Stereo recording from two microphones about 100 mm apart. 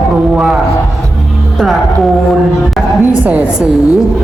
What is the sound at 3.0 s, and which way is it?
Speech, 15° right (ahead or behind).